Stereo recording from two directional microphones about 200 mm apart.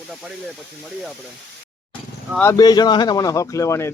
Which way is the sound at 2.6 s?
20° left (ahead or behind).